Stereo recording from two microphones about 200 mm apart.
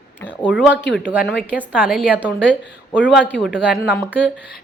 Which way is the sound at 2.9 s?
5° left (ahead or behind).